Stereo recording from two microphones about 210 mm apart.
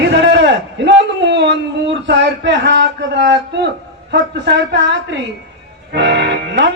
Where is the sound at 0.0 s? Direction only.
55° right (ahead or behind).